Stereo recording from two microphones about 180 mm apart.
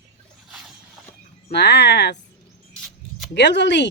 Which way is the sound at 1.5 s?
65° left (ahead or behind).